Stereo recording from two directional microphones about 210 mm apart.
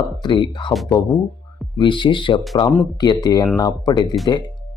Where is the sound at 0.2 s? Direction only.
20° left (ahead or behind).